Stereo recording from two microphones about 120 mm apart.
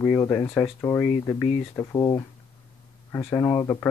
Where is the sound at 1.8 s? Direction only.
30° left (ahead or behind).